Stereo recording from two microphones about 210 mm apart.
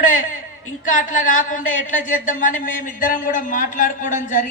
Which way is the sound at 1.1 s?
40° left (ahead or behind).